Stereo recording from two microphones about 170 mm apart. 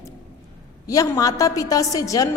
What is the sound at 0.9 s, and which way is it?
A woman's voice, 20° left (ahead or behind).